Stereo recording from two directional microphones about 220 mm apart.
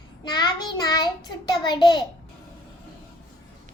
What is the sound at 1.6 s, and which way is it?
Speech, 20° left (ahead or behind).